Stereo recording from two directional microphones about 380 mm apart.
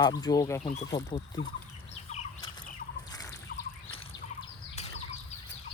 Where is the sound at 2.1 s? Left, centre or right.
Centre.